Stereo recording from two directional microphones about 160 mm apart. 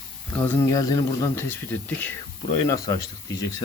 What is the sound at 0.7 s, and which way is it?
Speech, 25° left (ahead or behind).